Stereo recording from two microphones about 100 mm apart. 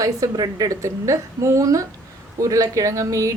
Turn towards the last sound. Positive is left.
turn(degrees=-35)  # may be behind; listen again after turning